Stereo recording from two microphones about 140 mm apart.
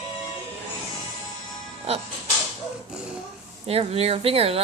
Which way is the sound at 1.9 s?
50° right (ahead or behind).